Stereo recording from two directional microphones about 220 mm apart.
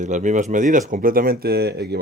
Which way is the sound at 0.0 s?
35° right (ahead or behind).